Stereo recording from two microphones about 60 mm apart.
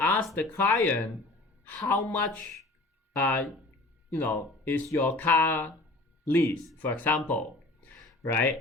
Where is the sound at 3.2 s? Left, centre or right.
Left.